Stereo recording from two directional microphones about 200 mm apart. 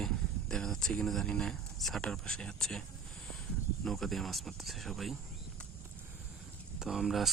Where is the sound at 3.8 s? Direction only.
Centre (ahead or behind).